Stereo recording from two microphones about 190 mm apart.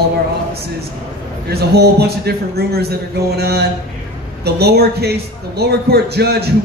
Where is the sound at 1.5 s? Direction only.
55° right (ahead or behind).